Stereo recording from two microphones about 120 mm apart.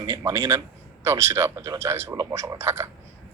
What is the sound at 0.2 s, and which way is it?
A man's voice, 25° right (ahead or behind).